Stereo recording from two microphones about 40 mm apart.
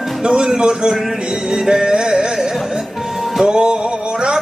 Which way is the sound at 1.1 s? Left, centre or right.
Right.